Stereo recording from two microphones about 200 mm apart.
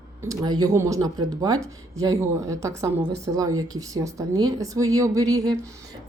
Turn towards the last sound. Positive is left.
turn(degrees=-15)  # may be behind; listen again after turning